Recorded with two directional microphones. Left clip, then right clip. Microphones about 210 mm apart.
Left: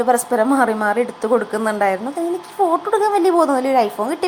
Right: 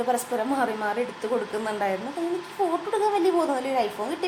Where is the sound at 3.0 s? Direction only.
35° left (ahead or behind).